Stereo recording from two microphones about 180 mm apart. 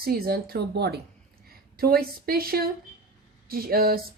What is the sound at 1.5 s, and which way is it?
A woman's voice, 55° right (ahead or behind).